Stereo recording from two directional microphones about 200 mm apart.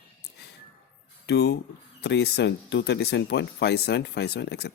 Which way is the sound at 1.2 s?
55° left (ahead or behind).